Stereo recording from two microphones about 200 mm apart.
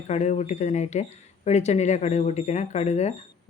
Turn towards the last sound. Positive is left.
turn(degrees=35)  # may be behind; listen again after turning